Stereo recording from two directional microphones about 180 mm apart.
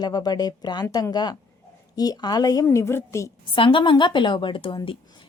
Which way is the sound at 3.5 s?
30° left (ahead or behind).